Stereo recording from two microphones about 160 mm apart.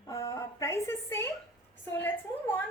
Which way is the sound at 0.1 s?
20° left (ahead or behind).